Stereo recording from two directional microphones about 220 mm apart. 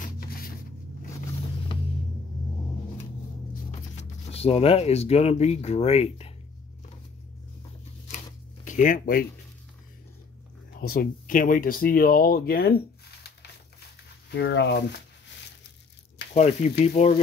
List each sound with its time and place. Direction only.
0.0 s a sound: 40° left (ahead or behind)
3.9 s speech: 25° left (ahead or behind)
8.6 s speech: 35° left (ahead or behind)
10.8 s speech: 40° left (ahead or behind)
14.3 s speech: 50° left (ahead or behind)
16.3 s speech: 30° left (ahead or behind)